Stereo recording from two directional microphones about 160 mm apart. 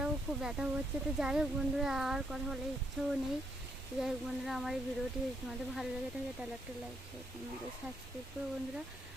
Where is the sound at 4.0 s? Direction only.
Centre (ahead or behind).